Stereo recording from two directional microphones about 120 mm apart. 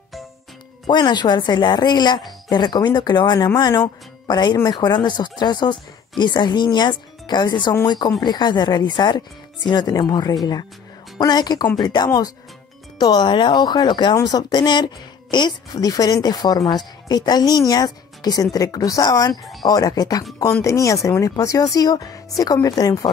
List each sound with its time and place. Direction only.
0.8 s a woman's voice: 40° left (ahead or behind)